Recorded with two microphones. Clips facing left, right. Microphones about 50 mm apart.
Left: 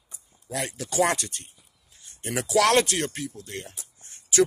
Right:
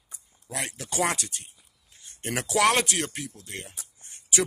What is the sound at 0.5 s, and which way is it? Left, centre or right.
Speech, right.